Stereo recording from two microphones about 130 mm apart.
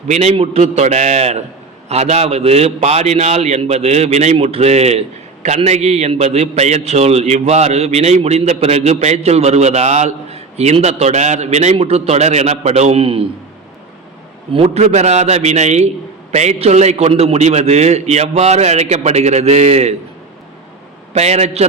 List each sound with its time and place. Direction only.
0.1 s a man's voice: 55° right (ahead or behind)
14.5 s a man's voice: 50° right (ahead or behind)
21.1 s a man's voice: 55° right (ahead or behind)